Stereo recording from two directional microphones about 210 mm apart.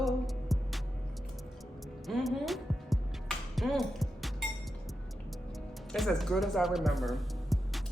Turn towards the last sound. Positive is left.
turn(degrees=0)  # may be behind; listen again after turning